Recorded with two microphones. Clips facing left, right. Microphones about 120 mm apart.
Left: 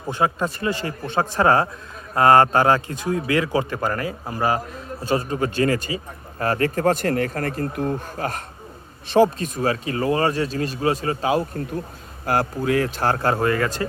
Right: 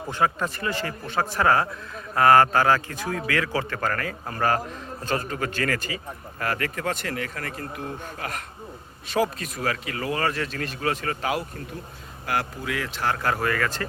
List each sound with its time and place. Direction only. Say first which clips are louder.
0.1 s a man's voice: left 3 dB; 15° left (ahead or behind)
12.2 s a man's voice: left 6 dB; 40° left (ahead or behind)